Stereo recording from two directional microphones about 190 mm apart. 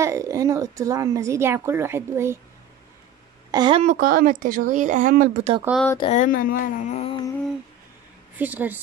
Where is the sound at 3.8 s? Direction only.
40° right (ahead or behind).